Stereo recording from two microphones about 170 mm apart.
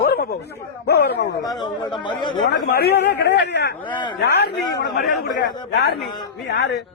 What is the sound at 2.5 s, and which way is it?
A man's voice, 70° left (ahead or behind).